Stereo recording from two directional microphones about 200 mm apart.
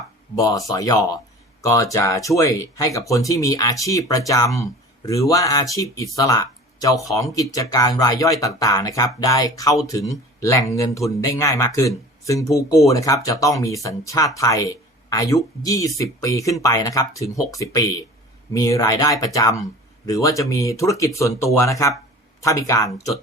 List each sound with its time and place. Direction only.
0.3 s speech: 15° left (ahead or behind)